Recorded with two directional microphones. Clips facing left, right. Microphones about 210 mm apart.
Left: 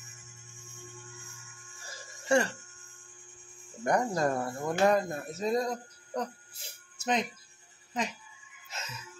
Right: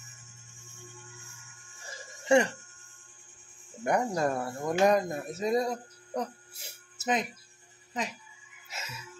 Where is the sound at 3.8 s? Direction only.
10° right (ahead or behind).